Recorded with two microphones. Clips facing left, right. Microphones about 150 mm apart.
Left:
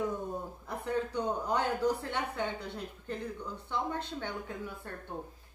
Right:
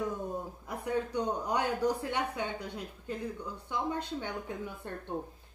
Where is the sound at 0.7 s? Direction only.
15° right (ahead or behind).